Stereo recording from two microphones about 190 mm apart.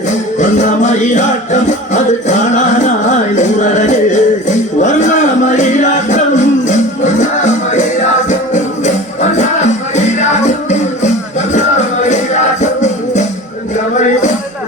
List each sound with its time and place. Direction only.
0.3 s music: 40° left (ahead or behind)
3.3 s music: 40° left (ahead or behind)
12.0 s music: 40° left (ahead or behind)